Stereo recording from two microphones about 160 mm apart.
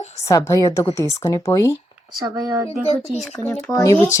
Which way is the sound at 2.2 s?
20° right (ahead or behind).